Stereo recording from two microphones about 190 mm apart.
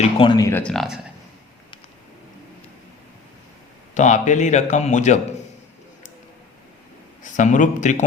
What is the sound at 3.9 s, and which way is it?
Speech, 40° left (ahead or behind).